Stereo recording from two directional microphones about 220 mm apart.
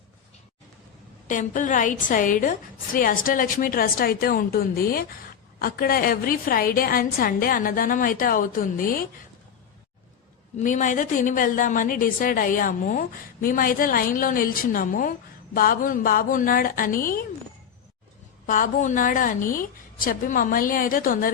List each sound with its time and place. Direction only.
1.3 s a woman's voice: 35° left (ahead or behind)
10.6 s a woman's voice: 35° left (ahead or behind)
18.4 s a woman's voice: 35° left (ahead or behind)